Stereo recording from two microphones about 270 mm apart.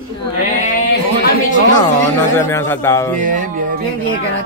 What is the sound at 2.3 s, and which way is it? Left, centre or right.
Speech, centre.